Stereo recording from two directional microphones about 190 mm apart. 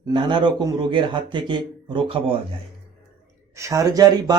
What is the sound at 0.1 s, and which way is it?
Speech, 25° right (ahead or behind).